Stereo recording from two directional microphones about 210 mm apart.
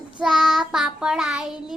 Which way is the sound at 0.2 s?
Centre (ahead or behind).